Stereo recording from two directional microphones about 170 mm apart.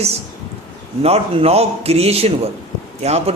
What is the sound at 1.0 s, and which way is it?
Speech, 35° right (ahead or behind).